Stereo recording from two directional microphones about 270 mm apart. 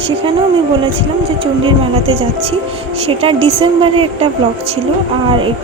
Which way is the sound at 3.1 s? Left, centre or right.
Right.